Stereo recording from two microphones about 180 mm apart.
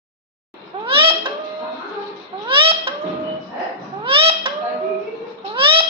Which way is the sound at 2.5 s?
30° right (ahead or behind).